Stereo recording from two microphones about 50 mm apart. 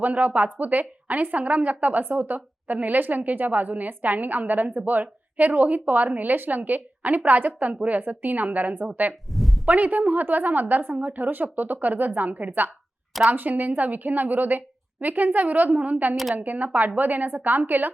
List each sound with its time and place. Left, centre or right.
0.0 s a woman's voice: right
9.3 s a sound: centre
9.6 s a woman's voice: right